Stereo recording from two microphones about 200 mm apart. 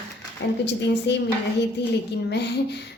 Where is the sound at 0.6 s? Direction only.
60° left (ahead or behind).